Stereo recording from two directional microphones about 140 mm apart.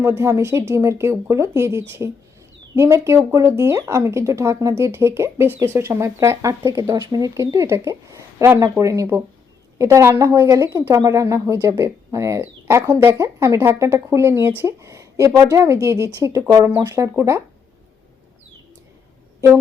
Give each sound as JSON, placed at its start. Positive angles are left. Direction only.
{"t": 0.0, "sound": "speech", "side_deg": -20}